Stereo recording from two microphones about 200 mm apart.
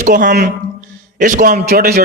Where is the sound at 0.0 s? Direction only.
40° right (ahead or behind).